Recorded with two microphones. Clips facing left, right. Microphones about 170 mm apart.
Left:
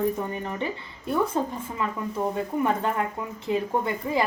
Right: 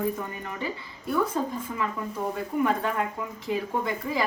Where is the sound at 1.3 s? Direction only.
25° left (ahead or behind).